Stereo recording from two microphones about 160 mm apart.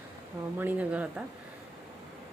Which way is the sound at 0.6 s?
10° right (ahead or behind).